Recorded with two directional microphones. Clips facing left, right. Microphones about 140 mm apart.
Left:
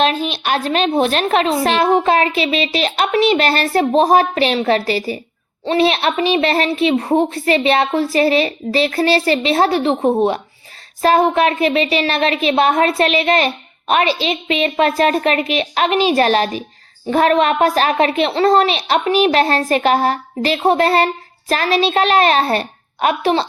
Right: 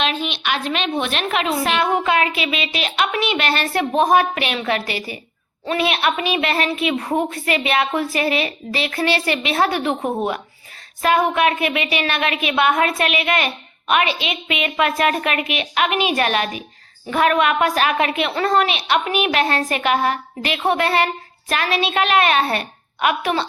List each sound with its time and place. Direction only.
0.0 s a woman's voice: 40° left (ahead or behind)